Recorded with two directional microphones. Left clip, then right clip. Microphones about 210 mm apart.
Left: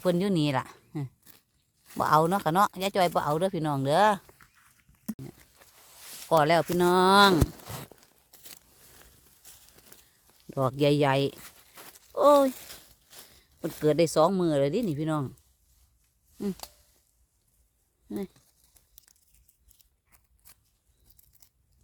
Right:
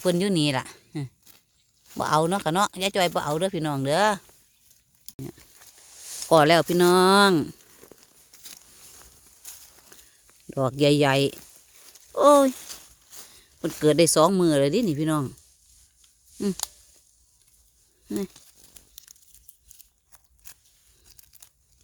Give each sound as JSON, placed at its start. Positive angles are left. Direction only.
{"t": 0.0, "sound": "speech", "side_deg": -10}
{"t": 6.2, "sound": "speech", "side_deg": -25}
{"t": 10.5, "sound": "speech", "side_deg": -15}
{"t": 12.5, "sound": "a sound", "side_deg": 0}
{"t": 13.4, "sound": "speech", "side_deg": -20}
{"t": 19.1, "sound": "a sound", "side_deg": -20}